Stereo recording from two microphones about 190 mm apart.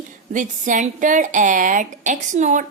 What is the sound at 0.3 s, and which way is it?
A woman's voice, 40° right (ahead or behind).